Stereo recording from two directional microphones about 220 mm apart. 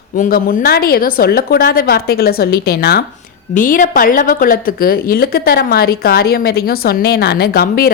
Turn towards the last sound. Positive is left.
turn(degrees=40)  # may be behind; listen again after turning